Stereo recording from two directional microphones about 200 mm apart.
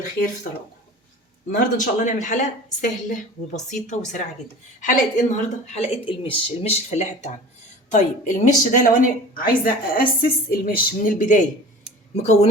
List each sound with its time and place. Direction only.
1.5 s speech: 40° left (ahead or behind)